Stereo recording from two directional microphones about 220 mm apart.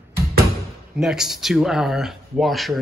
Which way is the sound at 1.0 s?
Centre (ahead or behind).